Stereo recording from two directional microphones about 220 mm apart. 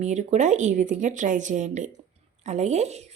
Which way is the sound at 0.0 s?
30° right (ahead or behind).